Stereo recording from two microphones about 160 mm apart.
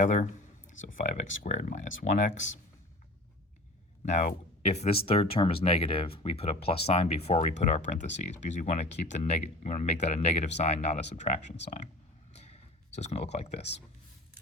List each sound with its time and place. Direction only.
0.0 s speech: 50° left (ahead or behind)
4.0 s speech: 45° left (ahead or behind)
12.3 s a sound: 45° left (ahead or behind)